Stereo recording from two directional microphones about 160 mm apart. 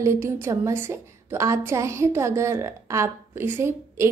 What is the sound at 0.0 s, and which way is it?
A woman's voice, 15° right (ahead or behind).